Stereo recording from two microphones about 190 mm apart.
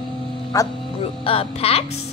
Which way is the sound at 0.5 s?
15° left (ahead or behind).